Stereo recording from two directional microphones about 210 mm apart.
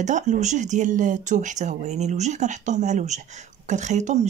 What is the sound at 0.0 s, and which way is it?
Speech, 35° right (ahead or behind).